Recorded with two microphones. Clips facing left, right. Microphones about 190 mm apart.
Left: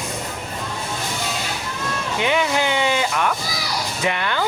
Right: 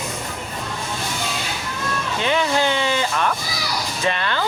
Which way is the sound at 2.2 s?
15° left (ahead or behind).